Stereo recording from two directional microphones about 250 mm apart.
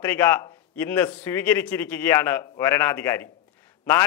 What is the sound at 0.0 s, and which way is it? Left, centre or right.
A man's voice, centre.